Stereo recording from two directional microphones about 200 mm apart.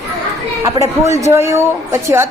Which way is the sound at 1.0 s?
15° right (ahead or behind).